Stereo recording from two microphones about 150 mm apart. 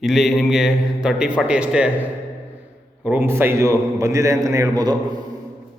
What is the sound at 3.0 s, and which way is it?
A man's voice, 15° right (ahead or behind).